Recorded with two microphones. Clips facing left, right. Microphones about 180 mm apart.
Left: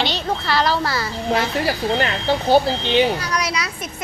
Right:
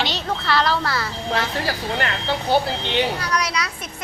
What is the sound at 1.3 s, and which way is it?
Speech, 15° left (ahead or behind).